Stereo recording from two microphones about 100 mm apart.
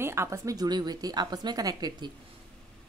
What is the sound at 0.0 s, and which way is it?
A woman's voice, 25° right (ahead or behind).